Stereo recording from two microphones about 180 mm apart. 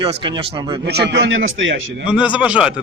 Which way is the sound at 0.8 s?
65° right (ahead or behind).